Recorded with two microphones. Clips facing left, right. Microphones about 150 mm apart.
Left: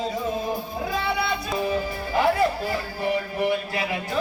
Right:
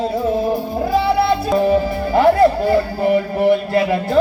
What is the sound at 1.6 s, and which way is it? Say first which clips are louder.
Music: right 10 dB; 65° right (ahead or behind).